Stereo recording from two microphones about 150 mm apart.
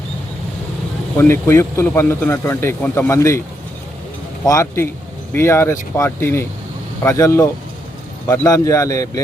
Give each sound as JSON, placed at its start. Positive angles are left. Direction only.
{"t": 1.1, "sound": "a man's voice", "side_deg": 15}
{"t": 4.4, "sound": "a man's voice", "side_deg": 20}